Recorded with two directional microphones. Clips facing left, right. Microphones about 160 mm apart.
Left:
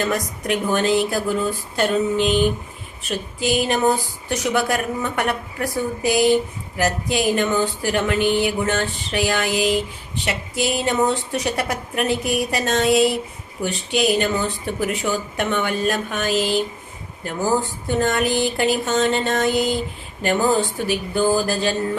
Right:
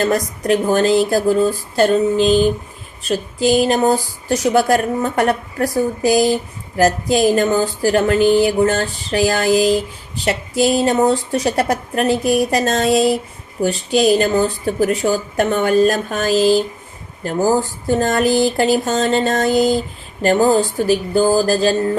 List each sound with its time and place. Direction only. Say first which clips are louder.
0.0 s speech: right 5 dB; 35° right (ahead or behind)